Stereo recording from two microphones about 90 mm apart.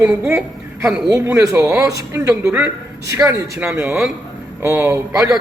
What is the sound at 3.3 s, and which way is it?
Speech, 25° right (ahead or behind).